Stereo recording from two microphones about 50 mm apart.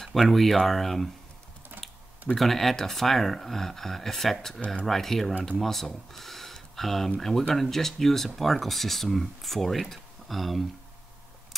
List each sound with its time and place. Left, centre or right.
0.0 s speech: centre
1.7 s typing: right
2.3 s speech: centre